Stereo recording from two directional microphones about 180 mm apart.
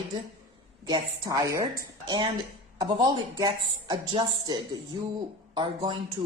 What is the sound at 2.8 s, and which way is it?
Speech, 25° right (ahead or behind).